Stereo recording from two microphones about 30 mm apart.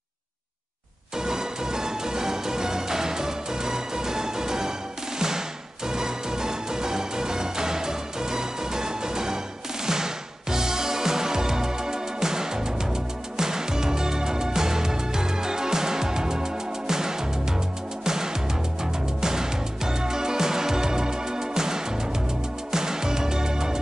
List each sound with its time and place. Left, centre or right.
1.1 s music: centre
5.9 s music: right